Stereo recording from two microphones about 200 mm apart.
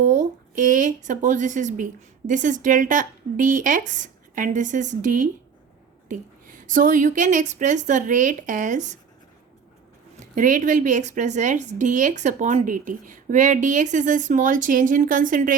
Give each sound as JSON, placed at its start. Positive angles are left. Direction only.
{"t": 0.0, "sound": "speech", "side_deg": -35}
{"t": 10.3, "sound": "speech", "side_deg": -40}